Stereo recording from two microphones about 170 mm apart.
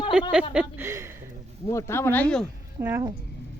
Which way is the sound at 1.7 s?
15° left (ahead or behind).